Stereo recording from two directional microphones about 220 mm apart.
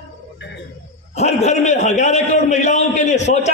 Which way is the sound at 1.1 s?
30° left (ahead or behind).